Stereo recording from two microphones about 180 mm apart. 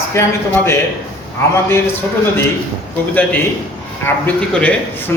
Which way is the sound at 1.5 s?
10° left (ahead or behind).